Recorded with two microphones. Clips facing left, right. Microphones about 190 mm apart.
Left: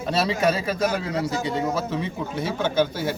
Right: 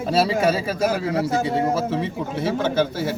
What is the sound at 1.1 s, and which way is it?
Speech, 55° right (ahead or behind).